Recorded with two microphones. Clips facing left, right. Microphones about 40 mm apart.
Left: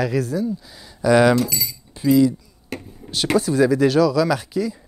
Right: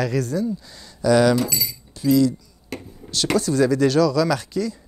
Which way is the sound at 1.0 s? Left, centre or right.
Centre.